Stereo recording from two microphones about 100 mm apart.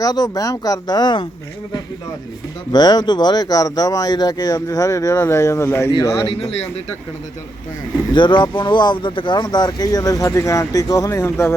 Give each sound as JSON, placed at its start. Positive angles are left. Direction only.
{"t": 0.0, "sound": "speech", "side_deg": 40}
{"t": 2.7, "sound": "speech", "side_deg": 45}
{"t": 6.2, "sound": "speech", "side_deg": 90}
{"t": 8.1, "sound": "speech", "side_deg": 50}